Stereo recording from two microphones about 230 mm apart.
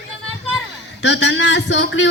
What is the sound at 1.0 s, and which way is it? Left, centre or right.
A man's voice, left.